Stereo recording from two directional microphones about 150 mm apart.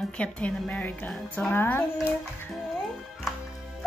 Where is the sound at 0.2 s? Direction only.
10° left (ahead or behind).